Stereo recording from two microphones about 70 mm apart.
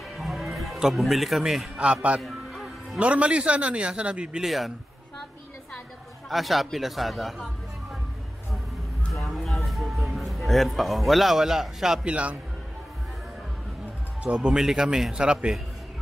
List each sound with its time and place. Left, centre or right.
0.2 s music: centre
1.8 s a man's voice: centre
2.2 s music: centre
3.0 s a man's voice: centre
4.5 s speech: centre
6.2 s speech: centre
9.1 s music: centre
14.2 s a man's voice: centre